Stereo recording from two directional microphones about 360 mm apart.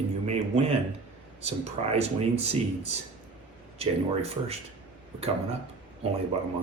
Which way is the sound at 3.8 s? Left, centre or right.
Centre.